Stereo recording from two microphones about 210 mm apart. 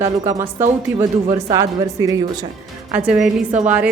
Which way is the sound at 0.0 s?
15° right (ahead or behind).